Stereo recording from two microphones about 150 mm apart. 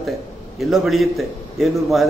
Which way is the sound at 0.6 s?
Centre (ahead or behind).